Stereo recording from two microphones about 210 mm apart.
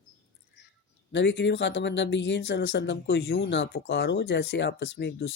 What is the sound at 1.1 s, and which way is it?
Speech, 55° left (ahead or behind).